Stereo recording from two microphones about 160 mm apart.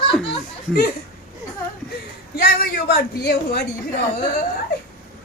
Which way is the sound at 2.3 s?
75° left (ahead or behind).